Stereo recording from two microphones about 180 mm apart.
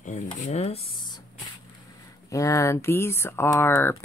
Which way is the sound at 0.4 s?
40° left (ahead or behind).